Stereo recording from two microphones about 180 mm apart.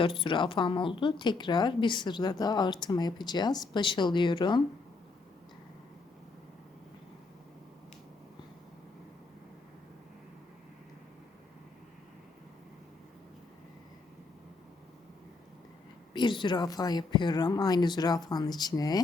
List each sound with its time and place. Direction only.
0.0 s speech: 30° left (ahead or behind)
16.1 s speech: 25° left (ahead or behind)